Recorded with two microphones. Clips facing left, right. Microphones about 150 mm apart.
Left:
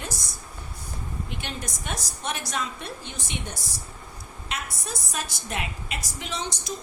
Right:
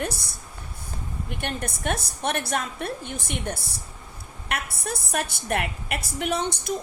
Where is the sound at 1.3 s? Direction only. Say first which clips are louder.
Right 8 dB; 55° right (ahead or behind).